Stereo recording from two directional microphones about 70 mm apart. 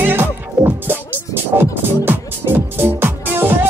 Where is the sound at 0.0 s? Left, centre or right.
Right.